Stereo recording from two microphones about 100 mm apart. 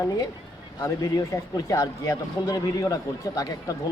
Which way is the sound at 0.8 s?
35° left (ahead or behind).